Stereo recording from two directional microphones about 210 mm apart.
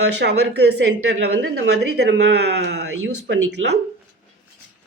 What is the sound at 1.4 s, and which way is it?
A woman's voice, 55° right (ahead or behind).